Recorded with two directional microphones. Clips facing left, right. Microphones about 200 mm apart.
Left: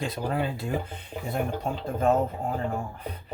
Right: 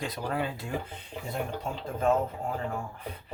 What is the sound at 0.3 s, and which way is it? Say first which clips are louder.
Speech: left 2 dB; 25° left (ahead or behind).